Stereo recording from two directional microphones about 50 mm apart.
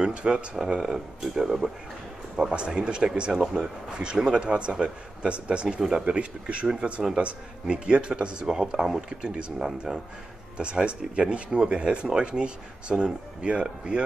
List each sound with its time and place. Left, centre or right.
0.0 s speech: centre
0.6 s speech: centre
5.8 s speech: centre
6.1 s speech: right
10.6 s speech: right